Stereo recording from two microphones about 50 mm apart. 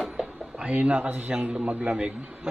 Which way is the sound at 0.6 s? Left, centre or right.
Right.